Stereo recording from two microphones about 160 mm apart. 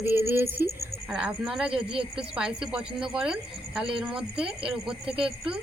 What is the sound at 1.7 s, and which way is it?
Speech, 35° right (ahead or behind).